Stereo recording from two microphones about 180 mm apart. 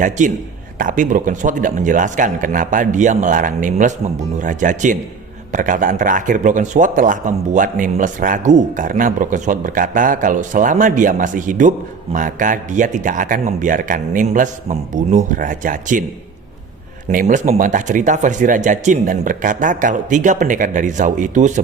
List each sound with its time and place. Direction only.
0.0 s speech: 45° right (ahead or behind)
17.1 s speech: 45° right (ahead or behind)